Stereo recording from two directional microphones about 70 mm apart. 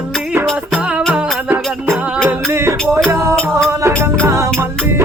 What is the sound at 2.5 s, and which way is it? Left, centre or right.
Music, right.